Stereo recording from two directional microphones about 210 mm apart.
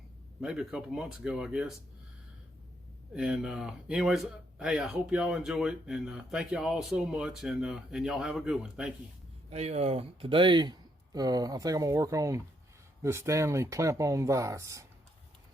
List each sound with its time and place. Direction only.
0.4 s speech: 5° right (ahead or behind)
3.2 s speech: 5° right (ahead or behind)
9.5 s speech: 30° right (ahead or behind); by 14.8 s 15° right (ahead or behind)